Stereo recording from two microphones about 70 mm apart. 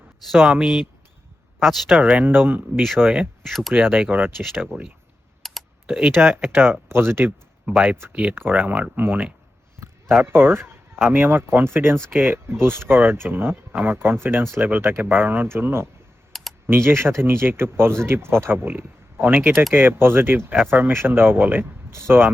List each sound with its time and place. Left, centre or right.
0.3 s speech: centre
2.0 s speech: right
5.4 s typing: centre
5.8 s speech: right
7.7 s speech: right
16.3 s computer keyboard: centre
16.6 s speech: right